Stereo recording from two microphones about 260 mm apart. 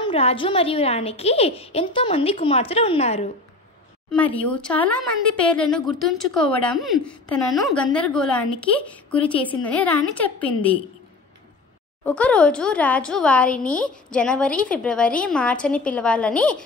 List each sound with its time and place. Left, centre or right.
0.0 s a woman's voice: left
4.1 s speech: centre
12.0 s speech: centre